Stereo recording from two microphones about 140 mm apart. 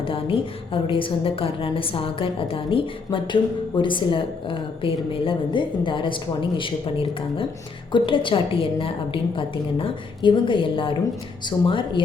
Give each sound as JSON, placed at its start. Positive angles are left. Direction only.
{"t": 0.0, "sound": "a woman's voice", "side_deg": 40}